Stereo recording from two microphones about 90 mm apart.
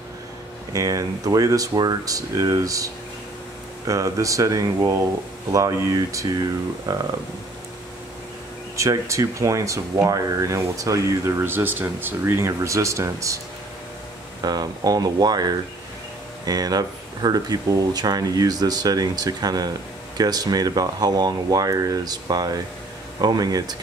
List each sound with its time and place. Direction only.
0.7 s speech: 40° right (ahead or behind)
8.7 s speech: 35° right (ahead or behind)
14.4 s speech: 50° right (ahead or behind)